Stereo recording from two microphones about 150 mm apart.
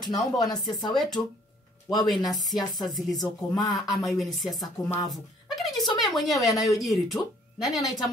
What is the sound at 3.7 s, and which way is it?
Speech, centre (ahead or behind).